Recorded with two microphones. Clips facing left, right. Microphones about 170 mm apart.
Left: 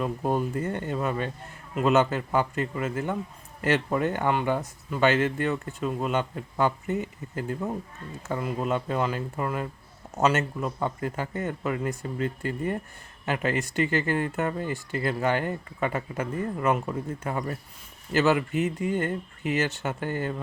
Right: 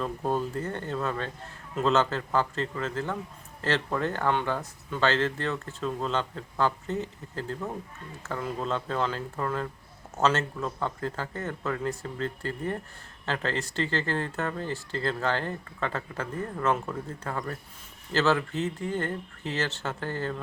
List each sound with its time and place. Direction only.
0.0 s speech: 15° left (ahead or behind)